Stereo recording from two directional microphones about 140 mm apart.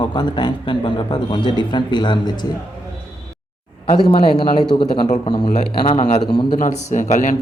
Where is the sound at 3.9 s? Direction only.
30° left (ahead or behind).